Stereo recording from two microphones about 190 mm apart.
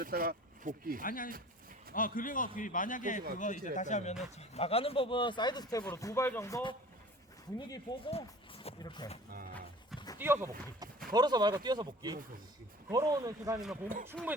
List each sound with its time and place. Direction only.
0.0 s speech: 50° right (ahead or behind)
1.0 s a man's voice: 45° left (ahead or behind); by 9.0 s 25° left (ahead or behind)
10.2 s speech: 10° right (ahead or behind)
13.6 s speech: centre (ahead or behind)